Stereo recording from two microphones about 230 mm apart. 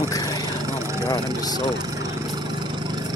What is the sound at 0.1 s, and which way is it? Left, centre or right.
Vehicle, centre.